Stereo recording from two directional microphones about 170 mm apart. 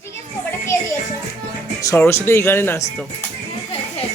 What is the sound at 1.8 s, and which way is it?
Speech, 15° left (ahead or behind).